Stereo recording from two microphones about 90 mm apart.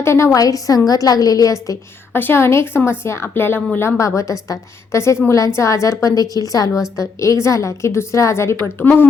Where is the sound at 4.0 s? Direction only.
35° left (ahead or behind).